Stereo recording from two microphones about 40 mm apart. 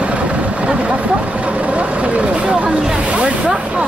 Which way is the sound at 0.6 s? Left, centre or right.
Right.